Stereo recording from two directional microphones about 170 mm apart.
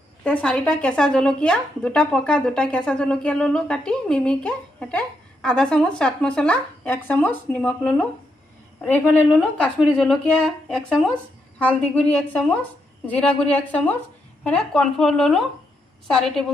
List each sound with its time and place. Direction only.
0.2 s speech: 5° left (ahead or behind)
9.4 s a woman's voice: 5° left (ahead or behind)